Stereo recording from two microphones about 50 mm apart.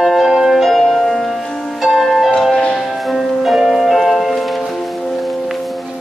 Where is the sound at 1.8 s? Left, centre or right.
Centre.